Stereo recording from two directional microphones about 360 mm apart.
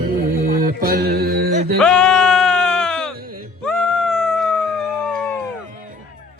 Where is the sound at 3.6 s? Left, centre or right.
Centre.